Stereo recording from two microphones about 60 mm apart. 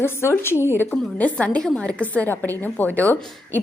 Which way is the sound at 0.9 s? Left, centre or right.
Left.